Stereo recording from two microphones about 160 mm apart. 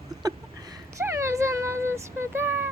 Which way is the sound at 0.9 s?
15° right (ahead or behind).